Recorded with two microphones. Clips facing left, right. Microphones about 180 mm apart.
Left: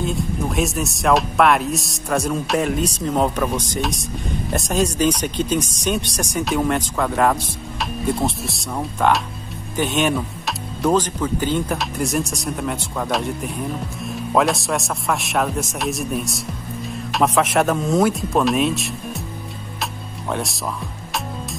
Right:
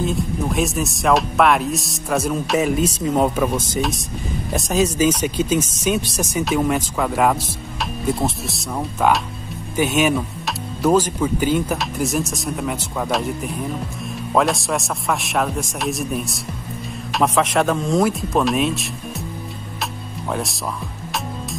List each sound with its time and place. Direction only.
0.0 s speech: centre (ahead or behind)
20.2 s speech: centre (ahead or behind)